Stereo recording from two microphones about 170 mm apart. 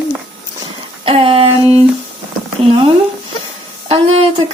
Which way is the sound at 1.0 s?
35° right (ahead or behind).